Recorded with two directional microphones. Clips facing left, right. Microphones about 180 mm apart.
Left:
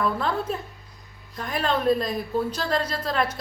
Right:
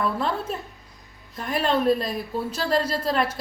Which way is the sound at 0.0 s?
5° right (ahead or behind).